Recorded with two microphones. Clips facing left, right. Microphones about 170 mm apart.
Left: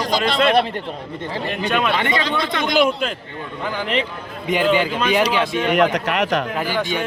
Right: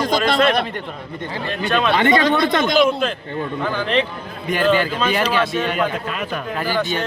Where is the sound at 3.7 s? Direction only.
15° left (ahead or behind).